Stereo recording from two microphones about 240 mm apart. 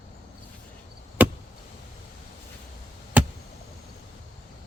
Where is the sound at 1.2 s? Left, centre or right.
Centre.